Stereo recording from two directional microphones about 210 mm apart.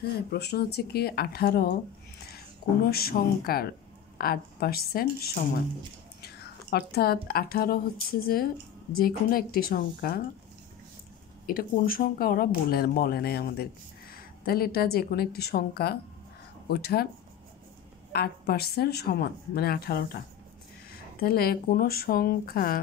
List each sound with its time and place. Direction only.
0.0 s a woman's voice: 50° left (ahead or behind)
11.4 s speech: 45° left (ahead or behind)
18.1 s speech: 45° left (ahead or behind)